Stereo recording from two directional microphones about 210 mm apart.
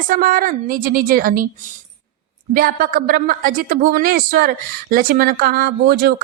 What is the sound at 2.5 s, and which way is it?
A woman's voice, 40° right (ahead or behind).